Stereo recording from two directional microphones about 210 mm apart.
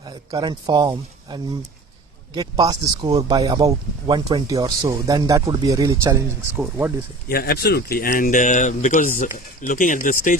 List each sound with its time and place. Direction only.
0.0 s speech: 20° right (ahead or behind)
7.3 s speech: 45° left (ahead or behind)